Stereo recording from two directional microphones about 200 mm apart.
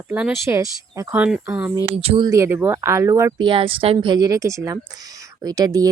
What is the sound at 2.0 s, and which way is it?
Speech, 25° right (ahead or behind).